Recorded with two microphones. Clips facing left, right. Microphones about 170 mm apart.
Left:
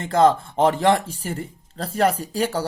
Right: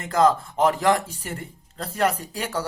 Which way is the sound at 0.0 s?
30° left (ahead or behind).